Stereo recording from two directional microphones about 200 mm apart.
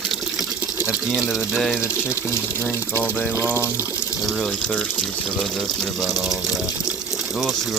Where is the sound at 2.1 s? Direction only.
15° left (ahead or behind).